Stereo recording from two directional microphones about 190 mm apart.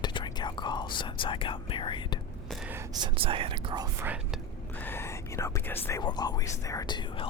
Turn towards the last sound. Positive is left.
turn(degrees=25)  # may be behind; listen again after turning